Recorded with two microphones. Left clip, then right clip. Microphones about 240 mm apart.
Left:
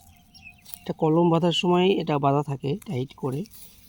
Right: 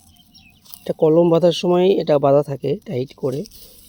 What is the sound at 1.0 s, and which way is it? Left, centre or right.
Speech, centre.